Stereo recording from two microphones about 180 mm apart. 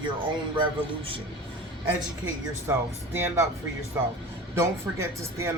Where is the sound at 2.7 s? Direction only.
15° right (ahead or behind).